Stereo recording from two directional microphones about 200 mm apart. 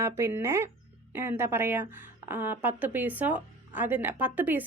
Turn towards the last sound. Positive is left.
turn(degrees=-10)  # may be behind; listen again after turning